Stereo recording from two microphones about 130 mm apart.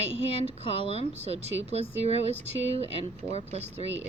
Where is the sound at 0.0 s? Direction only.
55° right (ahead or behind).